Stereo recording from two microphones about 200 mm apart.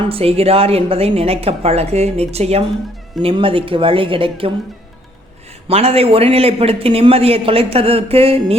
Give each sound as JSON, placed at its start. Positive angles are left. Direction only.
{"t": 0.0, "sound": "a man's voice", "side_deg": -30}
{"t": 5.6, "sound": "a man's voice", "side_deg": -30}